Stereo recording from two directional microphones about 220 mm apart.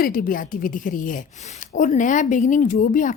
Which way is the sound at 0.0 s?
40° left (ahead or behind).